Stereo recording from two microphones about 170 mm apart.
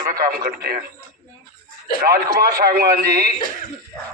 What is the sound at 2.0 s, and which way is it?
A man's voice, 60° right (ahead or behind).